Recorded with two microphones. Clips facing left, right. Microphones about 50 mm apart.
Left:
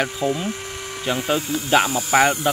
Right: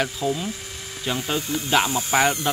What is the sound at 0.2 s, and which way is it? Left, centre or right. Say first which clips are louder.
Speech: left 2 dB; left.